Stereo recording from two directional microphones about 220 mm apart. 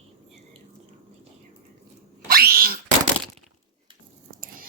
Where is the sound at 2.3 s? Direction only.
45° right (ahead or behind).